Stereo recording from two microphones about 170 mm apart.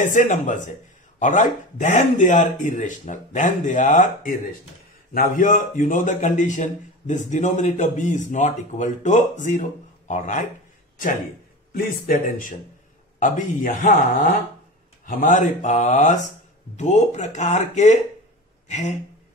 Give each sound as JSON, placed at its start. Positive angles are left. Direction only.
{"t": 0.0, "sound": "a man's voice", "side_deg": 45}
{"t": 11.7, "sound": "a man's voice", "side_deg": 55}
{"t": 15.0, "sound": "a man's voice", "side_deg": 50}